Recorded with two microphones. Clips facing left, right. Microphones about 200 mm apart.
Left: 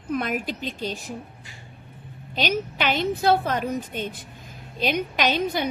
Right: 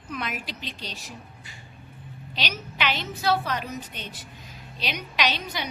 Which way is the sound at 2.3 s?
50° left (ahead or behind).